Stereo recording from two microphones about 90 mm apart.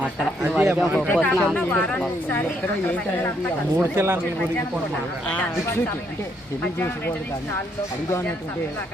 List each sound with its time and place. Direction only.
0.4 s speech: 5° right (ahead or behind)
0.9 s speech: 10° left (ahead or behind)
3.9 s a man's voice: 30° right (ahead or behind)